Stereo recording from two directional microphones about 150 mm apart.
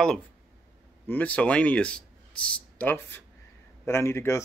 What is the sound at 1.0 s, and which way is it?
Speech, 10° left (ahead or behind).